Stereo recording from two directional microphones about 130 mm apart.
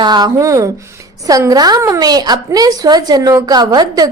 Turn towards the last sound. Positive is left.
turn(degrees=-30)  # may be behind; listen again after turning